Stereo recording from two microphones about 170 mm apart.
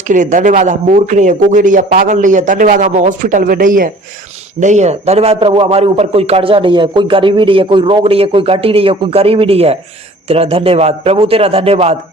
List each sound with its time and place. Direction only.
0.1 s a man's voice: 50° right (ahead or behind)